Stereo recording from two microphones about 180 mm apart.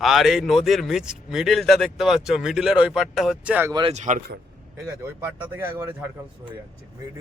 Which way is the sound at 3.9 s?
40° right (ahead or behind).